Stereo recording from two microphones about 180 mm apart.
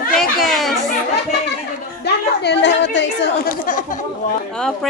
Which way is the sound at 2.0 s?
70° left (ahead or behind).